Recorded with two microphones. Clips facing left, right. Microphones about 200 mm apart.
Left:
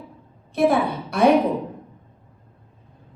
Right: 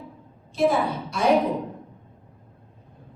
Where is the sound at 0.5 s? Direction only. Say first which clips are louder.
Left 3 dB; 60° left (ahead or behind).